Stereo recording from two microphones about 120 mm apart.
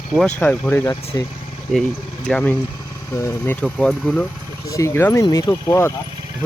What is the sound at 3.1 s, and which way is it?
Speech, 25° left (ahead or behind).